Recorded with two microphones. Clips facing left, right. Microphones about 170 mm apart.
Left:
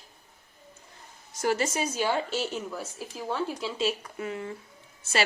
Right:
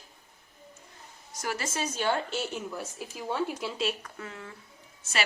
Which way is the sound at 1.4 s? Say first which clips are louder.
Left 6 dB; 25° left (ahead or behind).